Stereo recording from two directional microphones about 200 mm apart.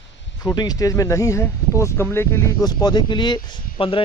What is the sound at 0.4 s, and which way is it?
Speech, 15° left (ahead or behind).